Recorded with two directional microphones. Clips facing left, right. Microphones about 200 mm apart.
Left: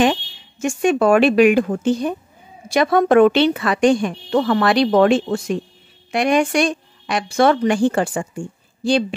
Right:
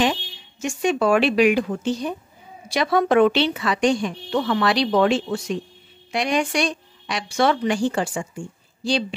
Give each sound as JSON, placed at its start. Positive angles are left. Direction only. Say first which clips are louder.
{"t": 0.0, "sound": "a woman's voice", "louder": "left 5 dB", "side_deg": 50}